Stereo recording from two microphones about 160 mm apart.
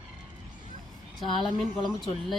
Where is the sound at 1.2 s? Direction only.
30° left (ahead or behind).